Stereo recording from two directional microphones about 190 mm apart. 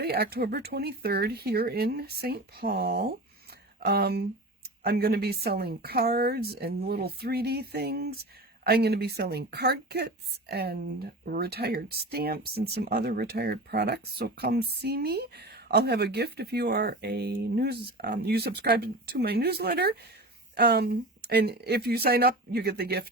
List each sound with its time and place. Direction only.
0.0 s speech: 55° right (ahead or behind)